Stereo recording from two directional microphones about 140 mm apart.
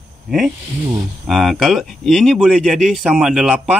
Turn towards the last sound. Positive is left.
turn(degrees=-5)  # may be behind; listen again after turning